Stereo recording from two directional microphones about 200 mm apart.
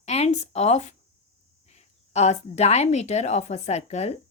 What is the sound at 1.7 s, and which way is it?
A woman's voice, 35° left (ahead or behind).